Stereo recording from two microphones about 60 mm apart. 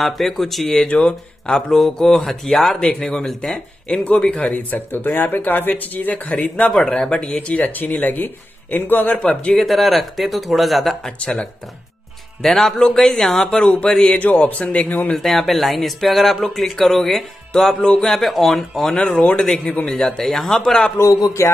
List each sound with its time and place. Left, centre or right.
0.0 s speech: centre
0.8 s speech: centre
4.6 s speech: left
6.7 s speech: centre
7.3 s speech: left
9.5 s speech: centre
12.4 s speech: centre
14.0 s speech: left
15.1 s speech: centre
19.6 s speech: left
19.9 s speech: centre
21.0 s speech: left